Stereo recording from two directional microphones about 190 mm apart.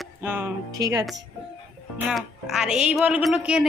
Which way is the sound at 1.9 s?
5° right (ahead or behind).